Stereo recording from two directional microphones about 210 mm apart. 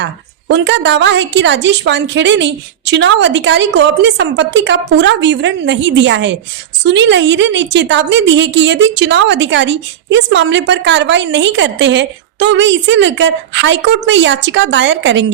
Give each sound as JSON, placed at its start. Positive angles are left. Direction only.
{"t": 0.0, "sound": "a woman's voice", "side_deg": -55}